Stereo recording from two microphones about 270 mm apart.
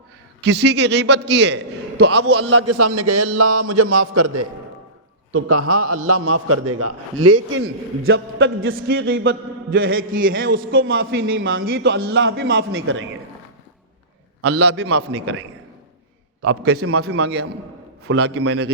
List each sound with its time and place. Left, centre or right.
0.4 s a man's voice: right
2.2 s a man's voice: right
2.7 s a man's voice: right
3.2 s a man's voice: right
5.3 s a man's voice: right
8.7 s a man's voice: right
14.4 s a man's voice: right
16.4 s a man's voice: right
17.1 s a man's voice: right
18.1 s a man's voice: right